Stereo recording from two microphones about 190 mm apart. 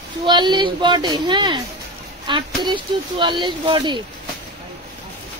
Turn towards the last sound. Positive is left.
turn(degrees=-25)  # may be behind; listen again after turning